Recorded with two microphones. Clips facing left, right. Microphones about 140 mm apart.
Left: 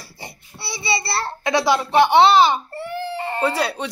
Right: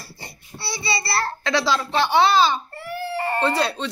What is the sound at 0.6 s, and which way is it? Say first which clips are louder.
A child's voice: left 2 dB; 25° left (ahead or behind).